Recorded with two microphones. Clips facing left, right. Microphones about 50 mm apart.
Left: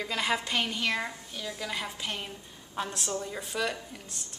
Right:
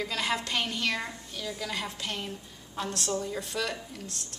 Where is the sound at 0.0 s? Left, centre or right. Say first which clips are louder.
Left 1 dB; centre.